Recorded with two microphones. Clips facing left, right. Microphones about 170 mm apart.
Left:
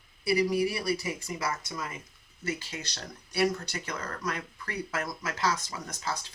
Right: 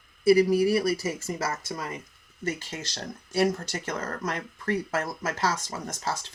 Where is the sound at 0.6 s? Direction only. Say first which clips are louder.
Right 6 dB; 40° right (ahead or behind).